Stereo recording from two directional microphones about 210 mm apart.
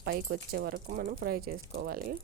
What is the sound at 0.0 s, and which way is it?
Speech, 50° right (ahead or behind).